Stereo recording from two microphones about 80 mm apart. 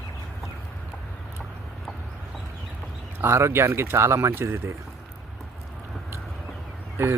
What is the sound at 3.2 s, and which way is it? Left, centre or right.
Speech, right.